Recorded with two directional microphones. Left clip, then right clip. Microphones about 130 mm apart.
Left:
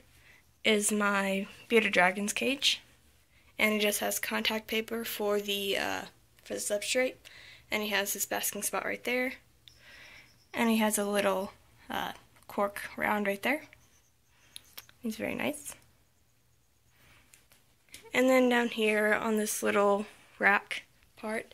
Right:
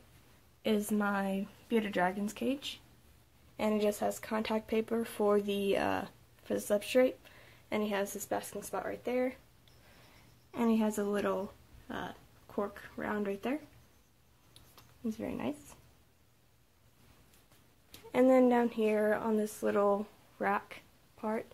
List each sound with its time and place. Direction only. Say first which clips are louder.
0.6 s speech: left 5 dB; centre (ahead or behind)
3.5 s speech: left 4 dB; 10° right (ahead or behind); by 7.3 s 45° right (ahead or behind)
7.7 s a woman's voice: left 3 dB; 30° right (ahead or behind)
8.5 s speech: left 4 dB; 5° right (ahead or behind)
10.5 s speech: left 4 dB; 10° left (ahead or behind)
10.9 s speech: left 3 dB; 20° left (ahead or behind)
11.1 s speech: left 5 dB; 10° left (ahead or behind)
14.5 s a sound: left 10 dB; 5° left (ahead or behind)
18.1 s speech: left 1 dB; 10° right (ahead or behind)
18.9 s speech: left 3 dB; 10° left (ahead or behind)
20.6 s a sound: left 12 dB; 5° right (ahead or behind)